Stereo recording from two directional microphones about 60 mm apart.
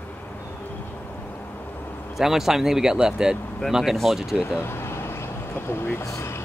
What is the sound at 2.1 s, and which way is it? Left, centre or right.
Speech, centre.